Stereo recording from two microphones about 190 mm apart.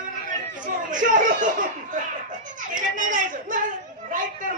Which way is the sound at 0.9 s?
45° right (ahead or behind).